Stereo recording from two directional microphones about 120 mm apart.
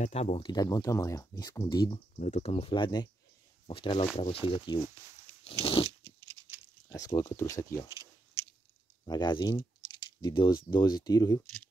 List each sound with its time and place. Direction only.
0.0 s speech: 60° left (ahead or behind)
0.4 s speech: 35° left (ahead or behind)
2.1 s speech: 80° left
2.5 s speech: 45° left (ahead or behind)
4.8 s speech: 25° right (ahead or behind)
5.4 s biting: 50° left (ahead or behind)
6.9 s speech: 30° left (ahead or behind)
9.0 s speech: 35° left (ahead or behind)